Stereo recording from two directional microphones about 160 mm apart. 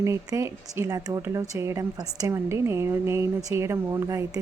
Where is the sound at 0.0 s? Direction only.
20° right (ahead or behind).